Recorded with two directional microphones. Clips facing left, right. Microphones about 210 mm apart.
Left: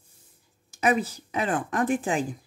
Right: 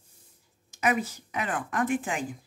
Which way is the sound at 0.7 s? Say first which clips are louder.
Left 3 dB; 30° left (ahead or behind).